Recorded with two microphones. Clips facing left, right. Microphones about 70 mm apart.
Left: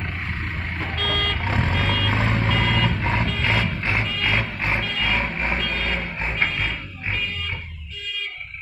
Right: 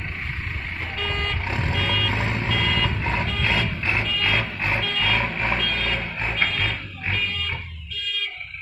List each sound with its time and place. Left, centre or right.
0.9 s vehicle: left
1.4 s vehicle: left
2.9 s music: left
5.4 s vehicle: centre
5.7 s music: left